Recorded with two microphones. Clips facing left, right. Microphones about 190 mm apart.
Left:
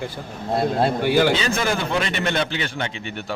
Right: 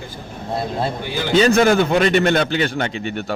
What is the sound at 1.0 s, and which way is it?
Speech, 65° left (ahead or behind).